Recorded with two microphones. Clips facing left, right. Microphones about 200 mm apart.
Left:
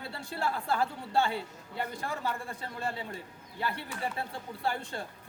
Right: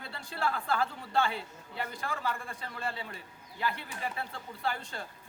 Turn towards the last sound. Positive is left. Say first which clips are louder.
# left 2 dB
turn(degrees=25)  # may be behind; listen again after turning